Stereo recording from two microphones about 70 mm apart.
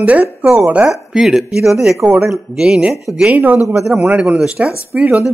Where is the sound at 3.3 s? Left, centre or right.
Right.